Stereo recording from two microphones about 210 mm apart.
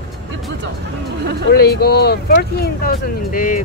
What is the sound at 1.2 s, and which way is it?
Speech, 50° right (ahead or behind).